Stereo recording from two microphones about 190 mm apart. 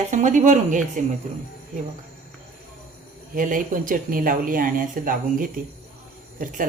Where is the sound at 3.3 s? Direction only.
45° right (ahead or behind).